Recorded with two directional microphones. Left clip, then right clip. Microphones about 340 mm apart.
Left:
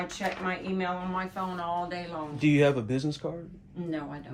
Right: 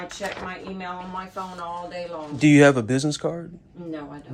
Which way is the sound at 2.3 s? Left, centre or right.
Right.